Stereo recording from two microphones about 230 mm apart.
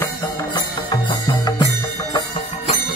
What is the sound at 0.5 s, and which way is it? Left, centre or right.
Music, centre.